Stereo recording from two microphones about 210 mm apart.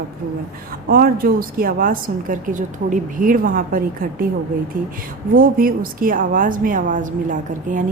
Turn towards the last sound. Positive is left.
turn(degrees=-40)  # may be behind; listen again after turning